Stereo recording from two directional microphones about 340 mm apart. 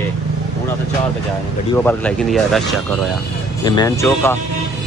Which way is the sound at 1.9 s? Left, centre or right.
Centre.